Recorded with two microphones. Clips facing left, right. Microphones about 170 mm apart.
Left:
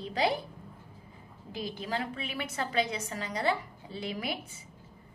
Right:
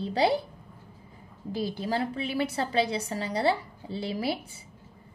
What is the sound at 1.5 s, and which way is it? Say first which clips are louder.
A woman's voice: right 6 dB; 35° right (ahead or behind).